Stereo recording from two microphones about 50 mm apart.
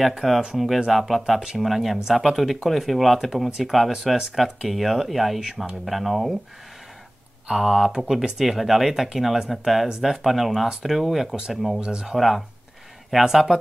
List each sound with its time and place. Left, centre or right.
0.0 s speech: centre
7.4 s speech: centre
11.8 s speech: centre
12.2 s speech: centre